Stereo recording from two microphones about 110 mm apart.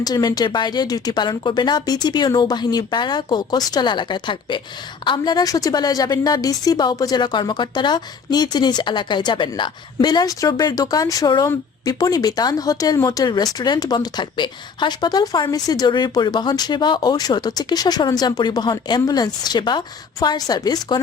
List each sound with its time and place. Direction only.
0.0 s speech: 40° left (ahead or behind)